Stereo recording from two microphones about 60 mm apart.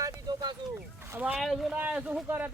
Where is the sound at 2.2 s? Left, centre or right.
Right.